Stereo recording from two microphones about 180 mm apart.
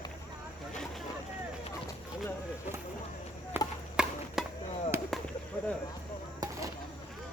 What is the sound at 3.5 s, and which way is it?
Chop, 10° right (ahead or behind).